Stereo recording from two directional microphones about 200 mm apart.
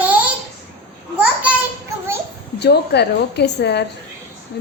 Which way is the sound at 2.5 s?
55° left (ahead or behind).